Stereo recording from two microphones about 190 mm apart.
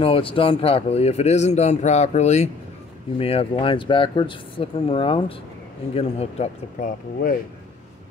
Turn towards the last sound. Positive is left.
turn(degrees=45)  # may be behind; listen again after turning